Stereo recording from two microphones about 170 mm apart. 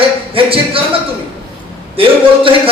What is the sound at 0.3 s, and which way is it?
Speech, 30° right (ahead or behind).